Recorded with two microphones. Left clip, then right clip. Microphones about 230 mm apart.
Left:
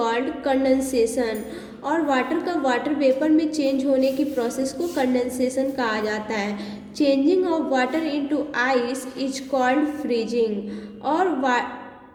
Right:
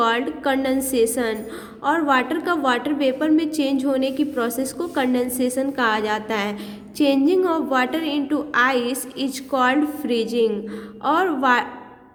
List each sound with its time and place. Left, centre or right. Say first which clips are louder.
0.0 s a woman's voice: right 3 dB; right